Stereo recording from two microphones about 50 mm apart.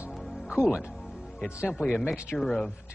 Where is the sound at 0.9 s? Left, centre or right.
Centre.